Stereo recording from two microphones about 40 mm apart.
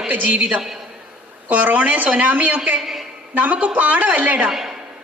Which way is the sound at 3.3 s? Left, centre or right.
Right.